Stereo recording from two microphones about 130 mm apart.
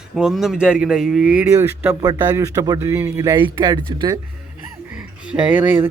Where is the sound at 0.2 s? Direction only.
5° right (ahead or behind).